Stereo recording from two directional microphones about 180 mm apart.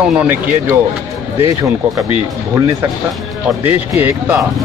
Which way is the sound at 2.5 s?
15° right (ahead or behind).